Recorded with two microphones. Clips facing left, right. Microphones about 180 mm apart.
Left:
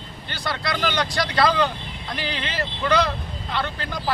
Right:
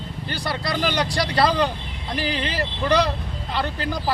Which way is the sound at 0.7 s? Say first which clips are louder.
Right 1 dB; 35° right (ahead or behind).